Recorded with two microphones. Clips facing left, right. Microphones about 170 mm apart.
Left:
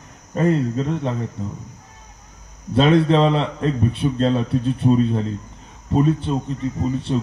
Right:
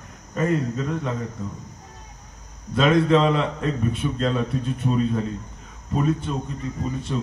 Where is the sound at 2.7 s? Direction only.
30° left (ahead or behind).